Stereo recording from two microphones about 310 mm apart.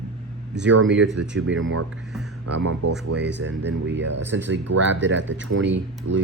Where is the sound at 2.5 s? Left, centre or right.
Right.